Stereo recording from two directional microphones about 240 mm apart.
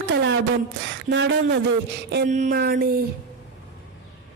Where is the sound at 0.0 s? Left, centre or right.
Right.